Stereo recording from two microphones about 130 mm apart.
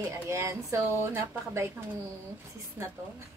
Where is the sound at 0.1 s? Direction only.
20° right (ahead or behind).